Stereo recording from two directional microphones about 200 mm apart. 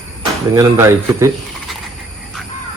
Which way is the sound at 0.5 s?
15° right (ahead or behind).